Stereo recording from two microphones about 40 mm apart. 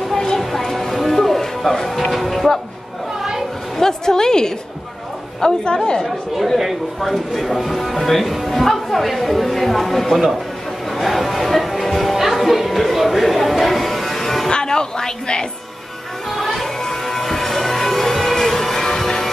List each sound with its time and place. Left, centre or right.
0.1 s a sound: centre
0.4 s music: centre
3.7 s a woman's voice: centre
6.0 s speech: centre
10.9 s music: centre
14.5 s a sound: left
16.3 s music: centre